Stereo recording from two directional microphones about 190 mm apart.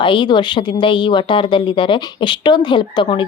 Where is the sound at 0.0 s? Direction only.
25° left (ahead or behind).